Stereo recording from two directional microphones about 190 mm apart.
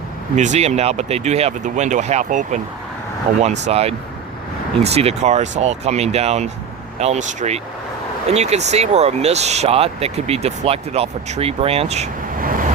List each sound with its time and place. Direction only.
0.3 s speech: 40° right (ahead or behind)